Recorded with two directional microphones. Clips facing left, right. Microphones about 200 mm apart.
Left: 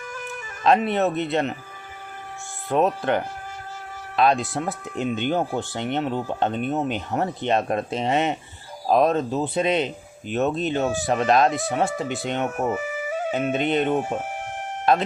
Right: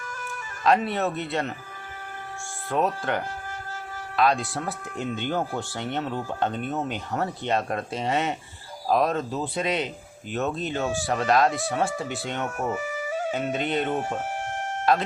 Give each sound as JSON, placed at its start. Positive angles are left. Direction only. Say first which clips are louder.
{"t": 0.6, "sound": "speech", "louder": "left 3 dB", "side_deg": 20}
{"t": 2.6, "sound": "speech", "louder": "left 4 dB", "side_deg": 20}
{"t": 4.2, "sound": "speech", "louder": "left 3 dB", "side_deg": 20}